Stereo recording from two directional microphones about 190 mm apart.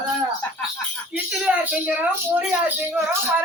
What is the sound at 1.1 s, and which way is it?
A woman's voice, 5° right (ahead or behind).